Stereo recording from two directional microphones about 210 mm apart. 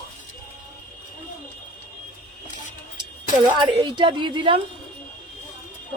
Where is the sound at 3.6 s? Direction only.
20° right (ahead or behind).